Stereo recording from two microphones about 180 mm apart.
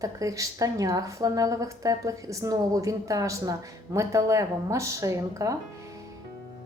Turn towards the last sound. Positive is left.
turn(degrees=-20)  # may be behind; listen again after turning